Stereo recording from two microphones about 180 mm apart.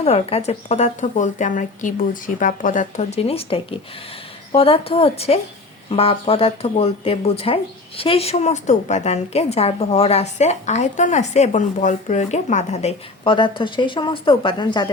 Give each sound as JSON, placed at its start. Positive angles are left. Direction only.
{"t": 0.0, "sound": "speech", "side_deg": 35}